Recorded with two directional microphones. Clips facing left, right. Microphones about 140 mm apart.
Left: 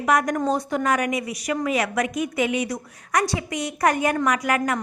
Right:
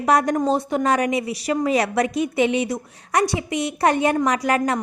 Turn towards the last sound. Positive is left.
turn(degrees=-30)  # may be behind; listen again after turning